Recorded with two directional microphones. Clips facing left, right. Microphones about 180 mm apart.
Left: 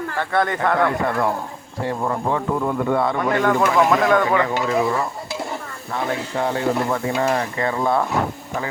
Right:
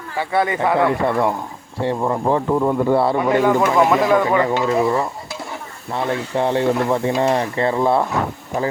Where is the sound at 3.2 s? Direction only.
5° right (ahead or behind).